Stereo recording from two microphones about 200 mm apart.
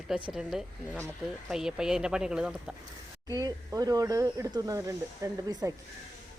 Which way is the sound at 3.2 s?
20° right (ahead or behind).